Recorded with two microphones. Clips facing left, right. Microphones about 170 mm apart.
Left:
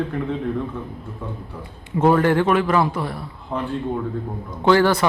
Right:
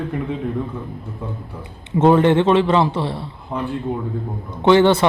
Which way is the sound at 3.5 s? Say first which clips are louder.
Right 1 dB; centre (ahead or behind).